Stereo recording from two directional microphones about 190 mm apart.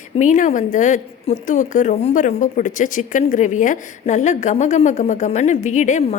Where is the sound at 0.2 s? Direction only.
40° left (ahead or behind).